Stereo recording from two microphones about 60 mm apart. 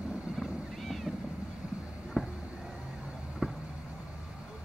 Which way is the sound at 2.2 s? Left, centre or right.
Centre.